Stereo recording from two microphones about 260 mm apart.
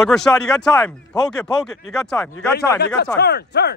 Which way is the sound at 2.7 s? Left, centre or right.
Left.